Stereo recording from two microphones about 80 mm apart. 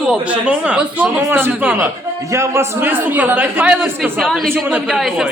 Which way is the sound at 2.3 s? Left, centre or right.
Right.